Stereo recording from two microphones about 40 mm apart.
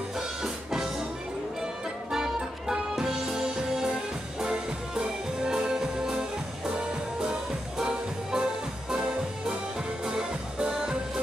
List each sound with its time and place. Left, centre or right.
0.4 s music: centre
2.1 s music: centre
7.8 s music: centre